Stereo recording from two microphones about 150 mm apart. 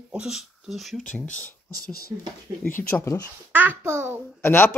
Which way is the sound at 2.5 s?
20° right (ahead or behind).